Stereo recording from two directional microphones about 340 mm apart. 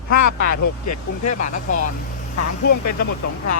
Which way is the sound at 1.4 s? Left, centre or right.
Left.